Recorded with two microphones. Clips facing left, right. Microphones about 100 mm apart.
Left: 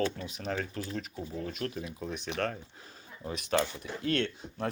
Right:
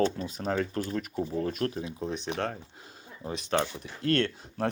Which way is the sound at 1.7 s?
30° right (ahead or behind).